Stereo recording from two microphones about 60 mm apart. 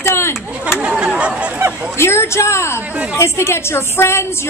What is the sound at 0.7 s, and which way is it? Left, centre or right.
Chatter, centre.